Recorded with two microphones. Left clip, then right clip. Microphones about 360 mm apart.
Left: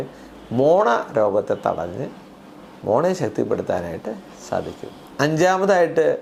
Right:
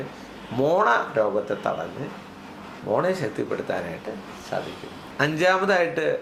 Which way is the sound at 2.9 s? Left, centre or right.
Left.